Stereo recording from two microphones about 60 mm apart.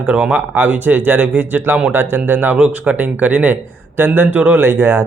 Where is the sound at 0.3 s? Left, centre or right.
Right.